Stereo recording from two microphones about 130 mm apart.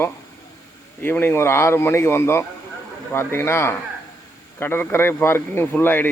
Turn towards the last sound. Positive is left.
turn(degrees=15)  # may be behind; listen again after turning